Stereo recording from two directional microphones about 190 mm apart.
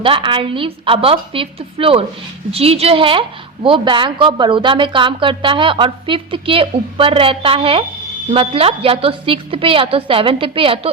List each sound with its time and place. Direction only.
0.0 s a woman's voice: 25° right (ahead or behind)